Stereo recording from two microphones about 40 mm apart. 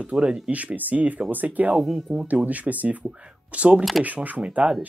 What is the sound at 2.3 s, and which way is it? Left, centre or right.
Speech, right.